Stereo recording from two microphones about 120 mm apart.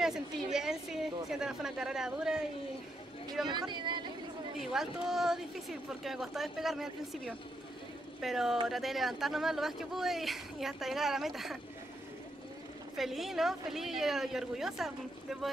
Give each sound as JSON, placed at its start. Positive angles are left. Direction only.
{"t": 0.0, "sound": "speech", "side_deg": -5}
{"t": 3.4, "sound": "speech", "side_deg": -40}
{"t": 4.6, "sound": "speech", "side_deg": -5}
{"t": 12.9, "sound": "speech", "side_deg": 0}